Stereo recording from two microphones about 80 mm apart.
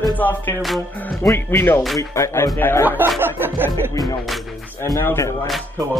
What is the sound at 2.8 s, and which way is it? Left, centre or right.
Speech, right.